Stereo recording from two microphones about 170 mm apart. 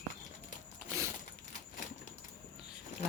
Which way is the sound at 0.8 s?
15° right (ahead or behind).